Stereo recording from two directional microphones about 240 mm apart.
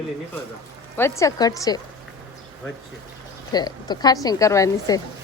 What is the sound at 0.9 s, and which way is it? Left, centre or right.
Speech, centre.